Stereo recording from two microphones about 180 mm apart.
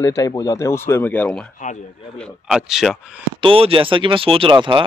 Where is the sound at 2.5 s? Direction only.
5° right (ahead or behind).